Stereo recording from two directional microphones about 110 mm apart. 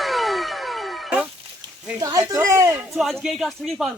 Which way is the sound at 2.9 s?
Centre (ahead or behind).